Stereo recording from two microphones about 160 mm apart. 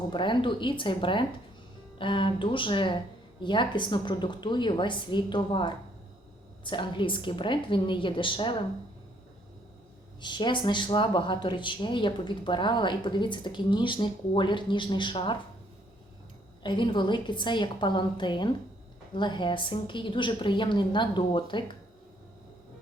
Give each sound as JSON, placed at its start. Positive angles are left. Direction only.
{"t": 0.1, "sound": "a woman's voice", "side_deg": 30}
{"t": 10.2, "sound": "speech", "side_deg": 30}
{"t": 16.6, "sound": "a woman's voice", "side_deg": 30}